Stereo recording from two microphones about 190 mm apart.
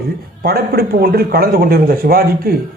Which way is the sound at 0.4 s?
55° right (ahead or behind).